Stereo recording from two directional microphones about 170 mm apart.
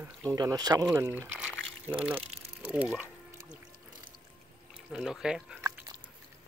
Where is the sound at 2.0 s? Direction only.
10° right (ahead or behind).